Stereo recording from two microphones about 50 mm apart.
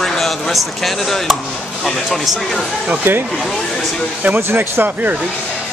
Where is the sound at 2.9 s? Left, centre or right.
Right.